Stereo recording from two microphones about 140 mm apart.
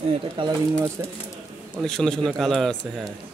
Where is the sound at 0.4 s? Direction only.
35° right (ahead or behind).